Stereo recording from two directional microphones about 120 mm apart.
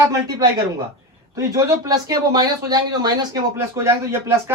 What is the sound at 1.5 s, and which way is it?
Speech, 25° right (ahead or behind).